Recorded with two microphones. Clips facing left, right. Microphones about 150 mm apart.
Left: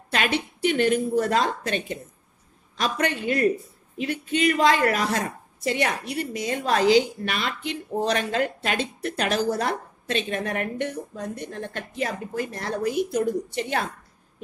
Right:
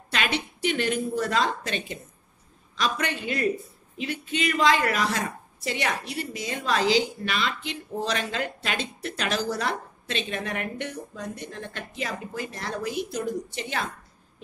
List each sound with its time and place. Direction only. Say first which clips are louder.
0.1 s a woman's voice: left 3 dB; 50° left (ahead or behind)